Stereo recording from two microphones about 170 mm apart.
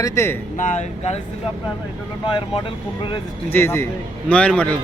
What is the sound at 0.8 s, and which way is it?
Speech, 40° left (ahead or behind).